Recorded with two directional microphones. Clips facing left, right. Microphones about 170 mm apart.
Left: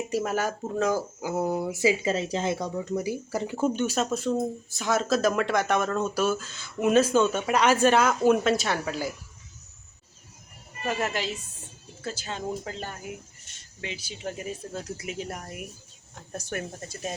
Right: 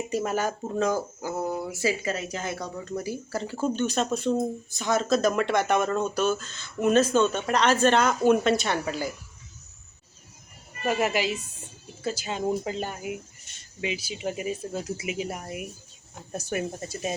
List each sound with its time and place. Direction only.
0.1 s speech: centre (ahead or behind)
2.1 s speech: 30° left (ahead or behind); by 9.1 s centre (ahead or behind)
10.8 s speech: 10° right (ahead or behind)